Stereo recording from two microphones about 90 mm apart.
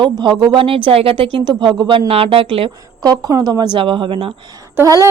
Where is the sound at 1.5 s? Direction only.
60° right (ahead or behind).